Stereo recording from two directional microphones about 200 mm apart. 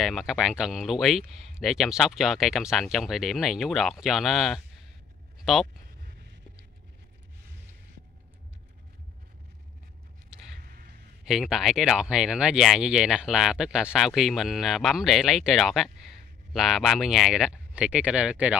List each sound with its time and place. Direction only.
0.0 s speech: centre (ahead or behind)
10.6 s a sound: 45° right (ahead or behind)
11.2 s speech: centre (ahead or behind)